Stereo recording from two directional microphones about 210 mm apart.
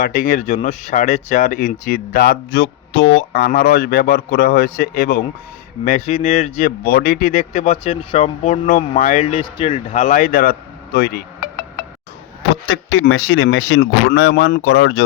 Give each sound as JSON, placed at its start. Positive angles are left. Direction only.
{"t": 0.0, "sound": "speech", "side_deg": 40}
{"t": 2.5, "sound": "speech", "side_deg": 65}
{"t": 3.3, "sound": "a man's voice", "side_deg": 45}
{"t": 12.9, "sound": "speech", "side_deg": 70}